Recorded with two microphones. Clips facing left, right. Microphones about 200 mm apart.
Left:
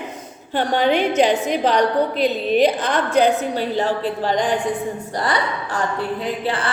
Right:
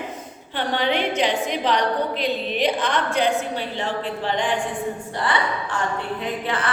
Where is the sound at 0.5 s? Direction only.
45° left (ahead or behind).